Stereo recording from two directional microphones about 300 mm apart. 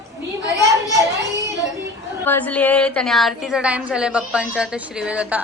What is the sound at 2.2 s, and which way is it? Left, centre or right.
A woman's voice, centre.